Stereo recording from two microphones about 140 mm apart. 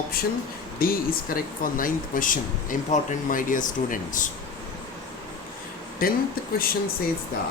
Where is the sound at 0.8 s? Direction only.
90° left; by 4.3 s 70° left (ahead or behind).